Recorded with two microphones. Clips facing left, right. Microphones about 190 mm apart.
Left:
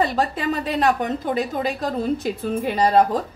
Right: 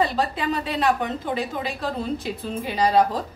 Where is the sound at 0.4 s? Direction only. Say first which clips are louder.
Left 3 dB; 45° left (ahead or behind).